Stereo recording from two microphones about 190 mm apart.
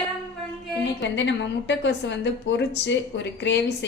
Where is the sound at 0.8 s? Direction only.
70° left (ahead or behind).